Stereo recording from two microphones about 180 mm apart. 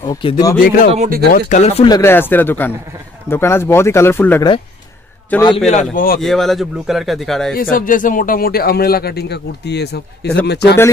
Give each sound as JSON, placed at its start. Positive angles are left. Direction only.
{"t": 0.0, "sound": "speech", "side_deg": 30}
{"t": 0.7, "sound": "speech", "side_deg": 55}
{"t": 0.9, "sound": "speech", "side_deg": -50}
{"t": 1.3, "sound": "speech", "side_deg": 40}
{"t": 1.9, "sound": "speech", "side_deg": 15}
{"t": 5.7, "sound": "speech", "side_deg": 45}
{"t": 6.2, "sound": "speech", "side_deg": 0}
{"t": 7.5, "sound": "speech", "side_deg": 50}